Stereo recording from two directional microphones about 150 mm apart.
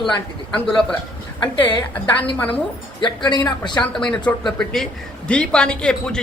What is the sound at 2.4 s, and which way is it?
Speech, 10° left (ahead or behind).